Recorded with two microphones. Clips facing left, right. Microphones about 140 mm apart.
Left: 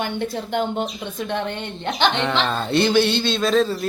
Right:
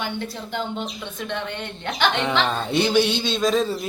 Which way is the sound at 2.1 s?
10° right (ahead or behind).